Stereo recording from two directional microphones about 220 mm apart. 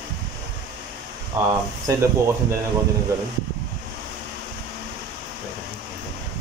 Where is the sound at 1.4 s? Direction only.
10° right (ahead or behind).